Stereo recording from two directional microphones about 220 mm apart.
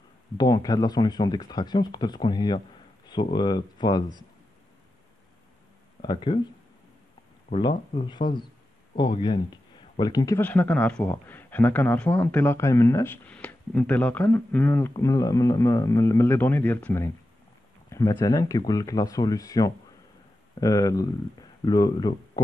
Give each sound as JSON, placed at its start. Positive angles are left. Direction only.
{"t": 0.4, "sound": "speech", "side_deg": 15}
{"t": 6.0, "sound": "speech", "side_deg": 20}
{"t": 7.4, "sound": "speech", "side_deg": 25}